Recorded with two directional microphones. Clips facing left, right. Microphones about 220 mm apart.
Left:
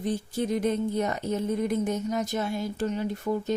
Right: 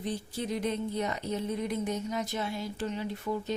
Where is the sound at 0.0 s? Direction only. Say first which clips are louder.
Left 6 dB; 45° left (ahead or behind).